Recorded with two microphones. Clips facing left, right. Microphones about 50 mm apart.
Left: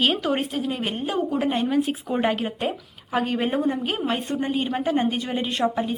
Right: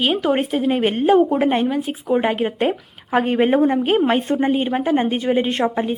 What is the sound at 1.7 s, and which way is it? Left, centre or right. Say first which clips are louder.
Speech: right 3 dB; centre.